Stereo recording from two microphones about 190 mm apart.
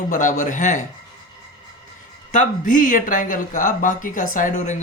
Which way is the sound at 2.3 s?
45° left (ahead or behind).